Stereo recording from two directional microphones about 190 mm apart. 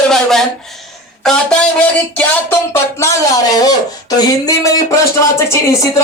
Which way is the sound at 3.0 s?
15° left (ahead or behind).